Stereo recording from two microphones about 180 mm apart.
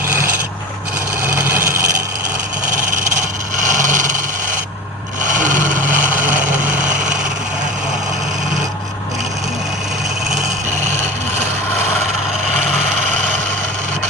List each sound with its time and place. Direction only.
1.4 s wood: 10° right (ahead or behind)
3.8 s vehicle: 45° right (ahead or behind)
5.2 s vehicle: 45° right (ahead or behind)